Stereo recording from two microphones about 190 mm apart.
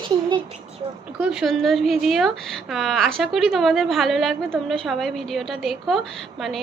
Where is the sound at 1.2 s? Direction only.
Centre (ahead or behind).